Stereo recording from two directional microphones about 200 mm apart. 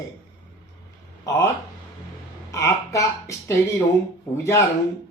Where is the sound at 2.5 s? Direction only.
15° left (ahead or behind).